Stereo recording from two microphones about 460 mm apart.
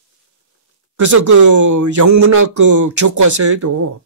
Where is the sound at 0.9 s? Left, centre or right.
Right.